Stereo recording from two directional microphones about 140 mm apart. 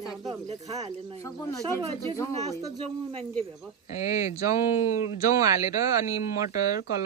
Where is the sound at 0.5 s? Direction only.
50° right (ahead or behind).